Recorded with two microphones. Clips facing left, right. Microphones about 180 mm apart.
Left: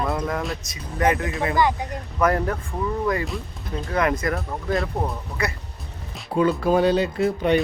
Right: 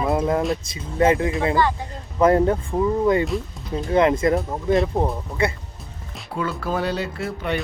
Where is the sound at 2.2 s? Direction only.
25° right (ahead or behind).